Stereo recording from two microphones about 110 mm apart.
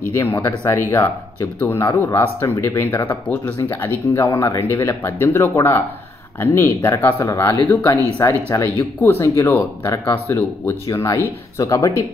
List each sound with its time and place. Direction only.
0.1 s speech: 25° left (ahead or behind)
3.1 s speech: 15° left (ahead or behind); by 12.0 s 30° left (ahead or behind)